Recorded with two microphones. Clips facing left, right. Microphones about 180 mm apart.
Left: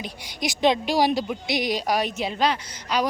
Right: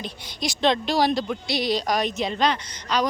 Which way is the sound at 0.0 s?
10° left (ahead or behind).